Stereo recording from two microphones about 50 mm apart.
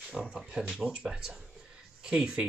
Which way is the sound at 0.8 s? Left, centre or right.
Right.